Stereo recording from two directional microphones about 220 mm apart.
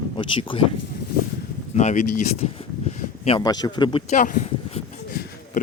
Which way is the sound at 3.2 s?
20° left (ahead or behind).